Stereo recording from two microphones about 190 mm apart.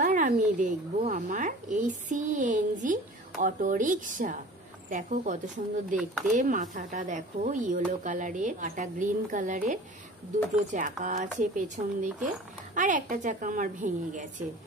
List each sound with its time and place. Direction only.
0.0 s a woman's voice: 45° right (ahead or behind)